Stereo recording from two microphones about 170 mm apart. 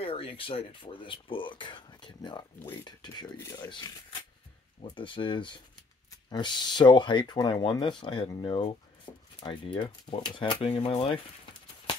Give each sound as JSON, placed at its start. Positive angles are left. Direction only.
{"t": 0.0, "sound": "speech", "side_deg": 35}